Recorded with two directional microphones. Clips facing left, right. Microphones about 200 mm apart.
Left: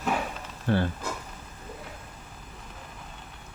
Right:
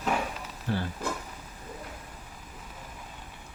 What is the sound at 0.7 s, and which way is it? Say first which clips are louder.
Speech: left 6 dB; 65° left (ahead or behind).